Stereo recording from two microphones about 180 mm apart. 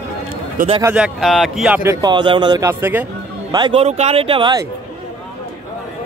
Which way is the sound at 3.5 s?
25° right (ahead or behind).